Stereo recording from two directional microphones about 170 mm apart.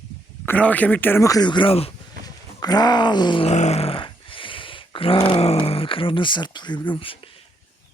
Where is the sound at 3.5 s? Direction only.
40° left (ahead or behind).